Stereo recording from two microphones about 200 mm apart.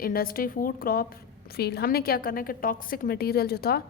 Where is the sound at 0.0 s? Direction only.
45° left (ahead or behind).